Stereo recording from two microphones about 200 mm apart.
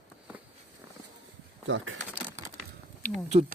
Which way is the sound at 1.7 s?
75° right (ahead or behind).